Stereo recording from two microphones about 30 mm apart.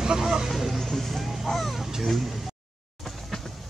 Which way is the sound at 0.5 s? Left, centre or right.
Centre.